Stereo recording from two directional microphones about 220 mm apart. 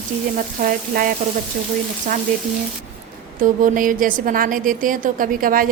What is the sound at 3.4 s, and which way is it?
A woman's voice, 40° right (ahead or behind).